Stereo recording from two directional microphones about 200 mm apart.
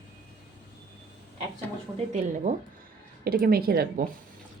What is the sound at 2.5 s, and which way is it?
Speech, 40° right (ahead or behind).